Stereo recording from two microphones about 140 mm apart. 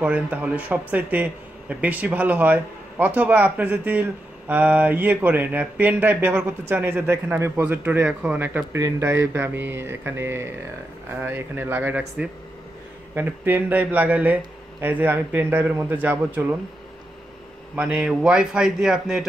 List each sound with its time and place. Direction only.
0.0 s speech: 10° right (ahead or behind)
17.7 s a man's voice: 5° right (ahead or behind)